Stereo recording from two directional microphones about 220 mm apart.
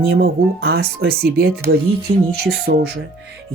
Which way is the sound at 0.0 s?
45° right (ahead or behind).